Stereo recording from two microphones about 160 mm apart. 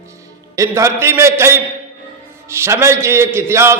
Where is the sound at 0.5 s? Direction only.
20° right (ahead or behind).